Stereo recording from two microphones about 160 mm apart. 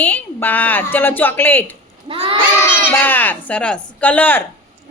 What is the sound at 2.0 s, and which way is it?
Crowd, 35° right (ahead or behind).